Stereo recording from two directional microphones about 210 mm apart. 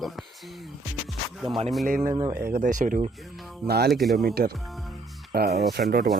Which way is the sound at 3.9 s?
Centre (ahead or behind).